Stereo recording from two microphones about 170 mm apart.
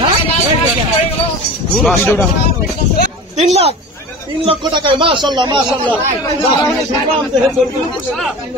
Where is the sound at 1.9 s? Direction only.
10° left (ahead or behind).